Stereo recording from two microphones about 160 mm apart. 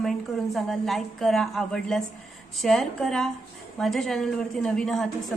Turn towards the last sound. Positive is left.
turn(degrees=0)  # may be behind; listen again after turning